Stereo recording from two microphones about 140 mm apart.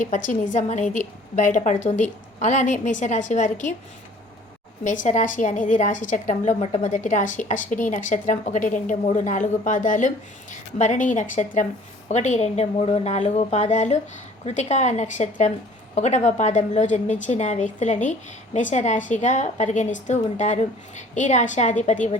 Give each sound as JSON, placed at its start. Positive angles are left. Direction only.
{"t": 0.0, "sound": "a woman's voice", "side_deg": 65}
{"t": 4.8, "sound": "a woman's voice", "side_deg": 65}